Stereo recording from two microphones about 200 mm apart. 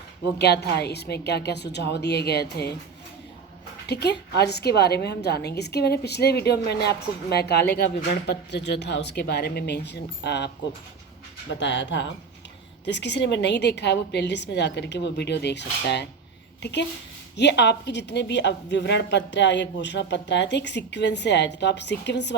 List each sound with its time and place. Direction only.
0.3 s a woman's voice: 55° left (ahead or behind)
3.8 s a woman's voice: 55° left (ahead or behind)
11.5 s a woman's voice: 65° left (ahead or behind)
17.3 s a woman's voice: 60° left (ahead or behind)